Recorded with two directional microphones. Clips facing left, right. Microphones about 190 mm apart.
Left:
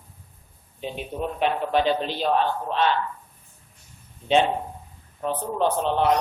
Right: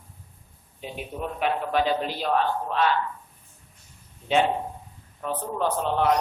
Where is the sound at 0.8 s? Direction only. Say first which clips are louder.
Left 3 dB; 25° left (ahead or behind).